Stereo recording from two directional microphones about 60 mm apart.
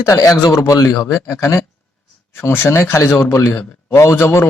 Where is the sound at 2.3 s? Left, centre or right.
Left.